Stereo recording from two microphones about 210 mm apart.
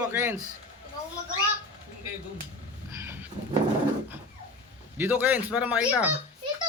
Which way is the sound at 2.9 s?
10° right (ahead or behind).